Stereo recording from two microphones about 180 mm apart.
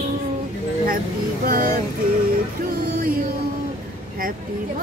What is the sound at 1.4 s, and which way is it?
Music, 50° right (ahead or behind).